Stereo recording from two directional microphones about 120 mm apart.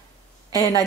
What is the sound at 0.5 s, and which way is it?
Speech, 35° left (ahead or behind).